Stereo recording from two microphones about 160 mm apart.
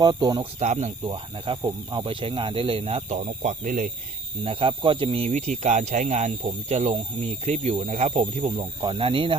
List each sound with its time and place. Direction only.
0.0 s speech: 25° right (ahead or behind)
0.6 s speech: 45° right (ahead or behind)
4.4 s speech: 35° right (ahead or behind)
5.3 s speech: 50° right (ahead or behind)
8.4 s speech: 30° right (ahead or behind)